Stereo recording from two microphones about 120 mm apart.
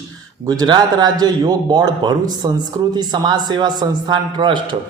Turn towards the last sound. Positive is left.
turn(degrees=-40)  # may be behind; listen again after turning